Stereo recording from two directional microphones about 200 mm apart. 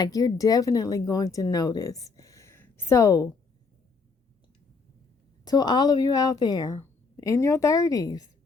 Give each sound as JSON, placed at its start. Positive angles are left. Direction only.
{"t": 0.0, "sound": "speech", "side_deg": 20}
{"t": 5.5, "sound": "a woman's voice", "side_deg": 20}